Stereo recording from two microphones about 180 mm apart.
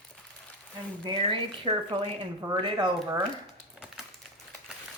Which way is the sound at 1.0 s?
30° right (ahead or behind).